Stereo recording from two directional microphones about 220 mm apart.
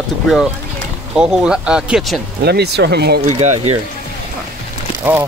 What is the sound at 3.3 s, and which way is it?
Speech, 30° right (ahead or behind).